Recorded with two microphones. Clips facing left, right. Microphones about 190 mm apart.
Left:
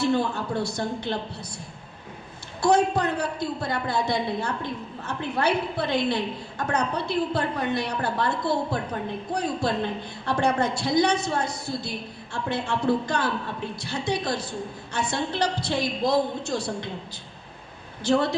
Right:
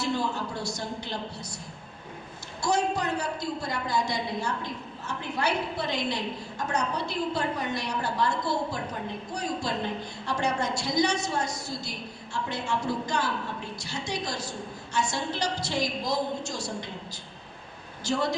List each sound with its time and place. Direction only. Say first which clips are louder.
0.0 s a woman's voice: left 5 dB; 60° left (ahead or behind)
2.6 s a woman's voice: left 6 dB; 60° left (ahead or behind)
18.0 s a woman's voice: left 5 dB; 60° left (ahead or behind)